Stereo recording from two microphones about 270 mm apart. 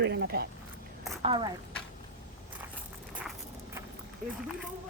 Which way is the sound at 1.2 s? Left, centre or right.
Right.